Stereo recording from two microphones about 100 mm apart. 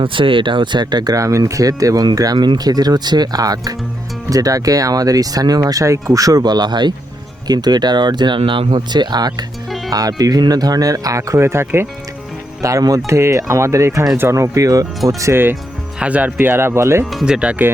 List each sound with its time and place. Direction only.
0.0 s speech: 60° right (ahead or behind)
9.6 s music: centre (ahead or behind)
9.9 s speech: 40° right (ahead or behind); by 11.9 s 25° right (ahead or behind)
12.6 s speech: 35° right (ahead or behind)
16.0 s speech: 15° right (ahead or behind)
17.1 s speech: 5° right (ahead or behind)